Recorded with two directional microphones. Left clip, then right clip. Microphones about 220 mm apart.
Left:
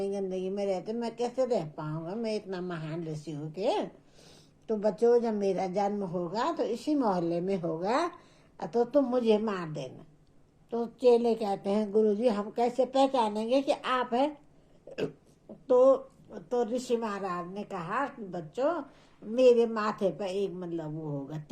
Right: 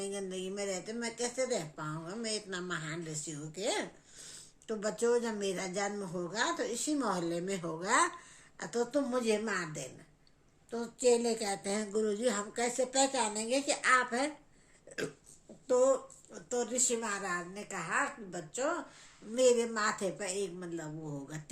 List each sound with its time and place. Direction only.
0.0 s speech: 25° right (ahead or behind)
15.6 s a woman's voice: 15° right (ahead or behind)
20.8 s speech: 35° right (ahead or behind)
21.2 s a woman's voice: 15° right (ahead or behind)